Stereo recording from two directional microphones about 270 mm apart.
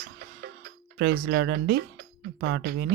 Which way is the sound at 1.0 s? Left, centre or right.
Right.